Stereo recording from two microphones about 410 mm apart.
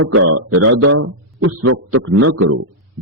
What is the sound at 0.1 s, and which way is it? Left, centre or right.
A man's voice, right.